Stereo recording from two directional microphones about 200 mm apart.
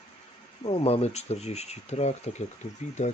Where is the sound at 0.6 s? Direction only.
30° left (ahead or behind).